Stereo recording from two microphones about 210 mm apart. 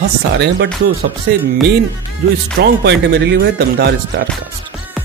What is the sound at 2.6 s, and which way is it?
A man's voice, 55° right (ahead or behind).